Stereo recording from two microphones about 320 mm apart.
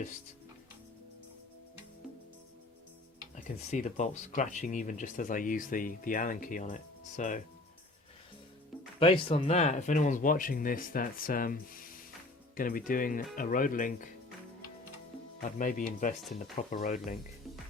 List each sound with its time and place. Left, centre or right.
3.3 s speech: left
9.0 s speech: centre
15.4 s speech: left